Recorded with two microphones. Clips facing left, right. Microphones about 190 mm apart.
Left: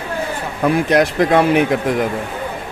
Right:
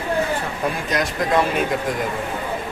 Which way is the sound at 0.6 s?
65° left (ahead or behind).